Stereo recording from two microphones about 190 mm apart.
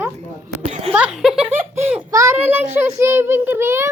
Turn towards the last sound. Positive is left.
turn(degrees=-15)  # may be behind; listen again after turning